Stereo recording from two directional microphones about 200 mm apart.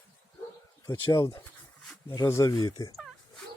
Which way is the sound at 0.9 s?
20° left (ahead or behind).